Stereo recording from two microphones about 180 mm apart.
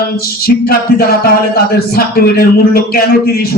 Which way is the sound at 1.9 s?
60° left (ahead or behind).